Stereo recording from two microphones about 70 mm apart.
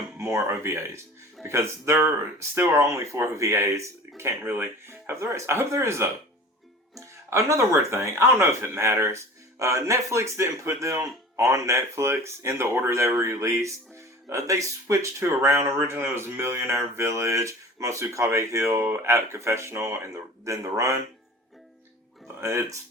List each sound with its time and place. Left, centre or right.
0.2 s speech: right
6.9 s speech: right
22.4 s speech: right